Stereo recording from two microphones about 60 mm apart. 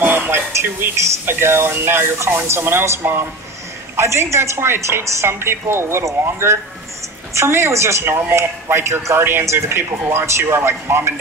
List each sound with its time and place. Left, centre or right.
0.0 s speech: right